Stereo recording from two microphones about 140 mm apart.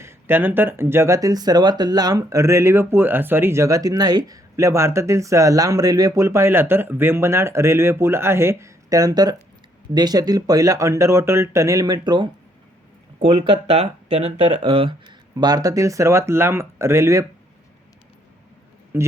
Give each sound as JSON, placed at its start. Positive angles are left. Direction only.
{"t": 0.0, "sound": "speech", "side_deg": -15}
{"t": 15.4, "sound": "speech", "side_deg": -30}
{"t": 18.9, "sound": "speech", "side_deg": -15}